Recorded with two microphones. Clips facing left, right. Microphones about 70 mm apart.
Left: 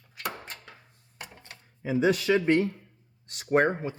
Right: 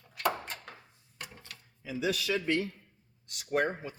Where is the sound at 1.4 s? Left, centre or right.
Left.